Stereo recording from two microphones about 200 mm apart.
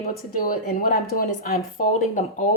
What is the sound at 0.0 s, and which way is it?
A woman's voice, 45° left (ahead or behind).